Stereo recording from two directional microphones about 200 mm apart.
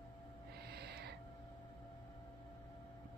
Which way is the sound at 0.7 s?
55° right (ahead or behind).